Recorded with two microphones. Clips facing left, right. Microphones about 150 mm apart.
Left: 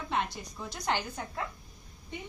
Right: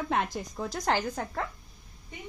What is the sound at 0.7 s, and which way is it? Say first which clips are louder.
Speech: right 4 dB; 90° right.